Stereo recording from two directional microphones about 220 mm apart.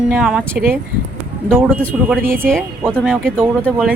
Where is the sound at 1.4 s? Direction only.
5° left (ahead or behind).